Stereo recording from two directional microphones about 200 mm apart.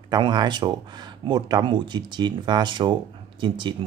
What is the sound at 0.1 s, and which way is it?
Speech, 20° right (ahead or behind).